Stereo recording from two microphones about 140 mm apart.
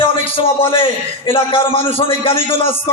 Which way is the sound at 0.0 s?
40° left (ahead or behind).